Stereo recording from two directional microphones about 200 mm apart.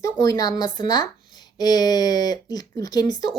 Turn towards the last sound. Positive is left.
turn(degrees=20)  # may be behind; listen again after turning